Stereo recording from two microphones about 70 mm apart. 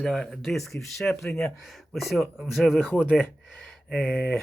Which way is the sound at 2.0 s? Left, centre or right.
Centre.